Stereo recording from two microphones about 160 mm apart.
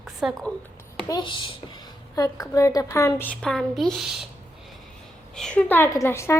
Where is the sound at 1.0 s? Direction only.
30° left (ahead or behind); by 4.2 s centre (ahead or behind).